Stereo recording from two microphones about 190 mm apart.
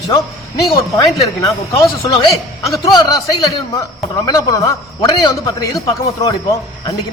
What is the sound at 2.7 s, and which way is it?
A man's voice, 20° left (ahead or behind).